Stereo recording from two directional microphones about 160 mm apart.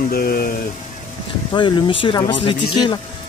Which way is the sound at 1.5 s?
30° left (ahead or behind).